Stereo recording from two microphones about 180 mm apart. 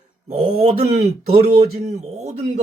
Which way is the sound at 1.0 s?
35° right (ahead or behind).